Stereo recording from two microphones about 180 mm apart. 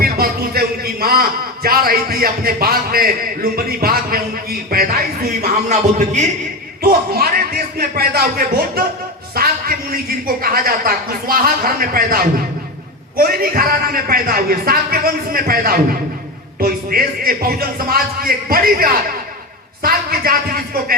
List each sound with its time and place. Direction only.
0.0 s a man's voice: 55° right (ahead or behind)
6.8 s a man's voice: 55° right (ahead or behind)